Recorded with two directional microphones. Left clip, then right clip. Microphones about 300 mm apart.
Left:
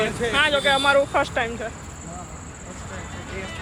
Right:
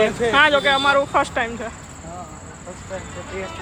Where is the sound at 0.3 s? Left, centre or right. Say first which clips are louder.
Right 4 dB; centre.